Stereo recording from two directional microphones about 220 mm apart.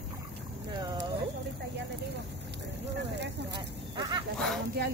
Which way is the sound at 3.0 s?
50° right (ahead or behind).